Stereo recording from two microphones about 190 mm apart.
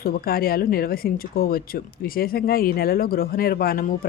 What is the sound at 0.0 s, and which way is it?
Speech, 50° left (ahead or behind).